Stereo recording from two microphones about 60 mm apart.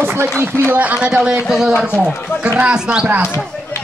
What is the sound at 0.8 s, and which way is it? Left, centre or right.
Speech, right.